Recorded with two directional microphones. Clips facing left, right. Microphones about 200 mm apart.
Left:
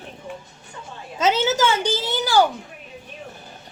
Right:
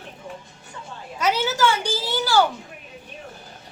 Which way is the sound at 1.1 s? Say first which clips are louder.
Left 3 dB; 25° left (ahead or behind).